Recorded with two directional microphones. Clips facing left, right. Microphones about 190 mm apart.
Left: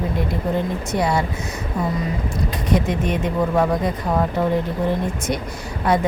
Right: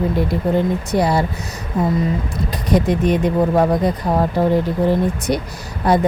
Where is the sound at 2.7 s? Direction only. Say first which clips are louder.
Right 5 dB; 35° right (ahead or behind).